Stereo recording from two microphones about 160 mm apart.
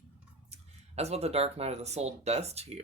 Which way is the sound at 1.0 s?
40° right (ahead or behind).